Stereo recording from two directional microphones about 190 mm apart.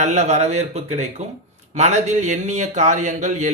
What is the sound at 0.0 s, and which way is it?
Speech, 35° right (ahead or behind).